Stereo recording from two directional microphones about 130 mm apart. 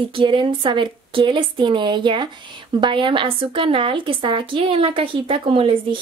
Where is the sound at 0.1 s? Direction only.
40° right (ahead or behind).